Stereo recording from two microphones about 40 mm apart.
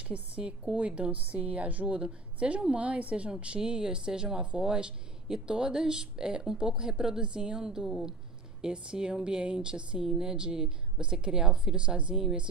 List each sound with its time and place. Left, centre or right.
0.1 s a woman's voice: right
8.9 s speech: right